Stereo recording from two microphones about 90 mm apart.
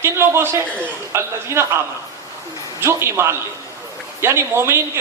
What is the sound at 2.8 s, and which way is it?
A man's voice, 30° right (ahead or behind).